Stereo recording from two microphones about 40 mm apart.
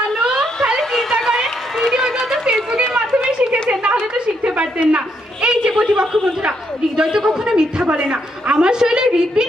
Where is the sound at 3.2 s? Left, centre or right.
Right.